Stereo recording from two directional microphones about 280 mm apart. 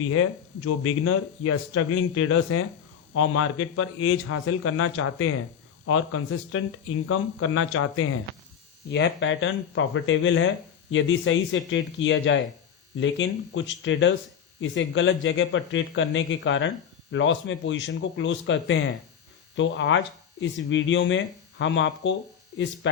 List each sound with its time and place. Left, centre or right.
0.1 s speech: left